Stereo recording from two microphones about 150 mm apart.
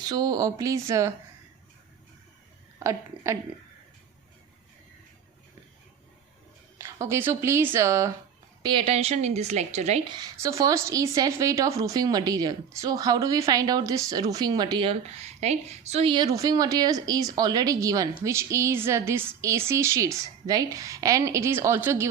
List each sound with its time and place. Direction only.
0.0 s speech: 25° right (ahead or behind)
2.7 s a woman's voice: 20° right (ahead or behind)
6.7 s speech: 15° right (ahead or behind)
8.6 s a woman's voice: 35° right (ahead or behind)
10.0 s speech: 30° right (ahead or behind)
15.0 s a woman's voice: 45° right (ahead or behind)
16.1 s speech: 25° right (ahead or behind)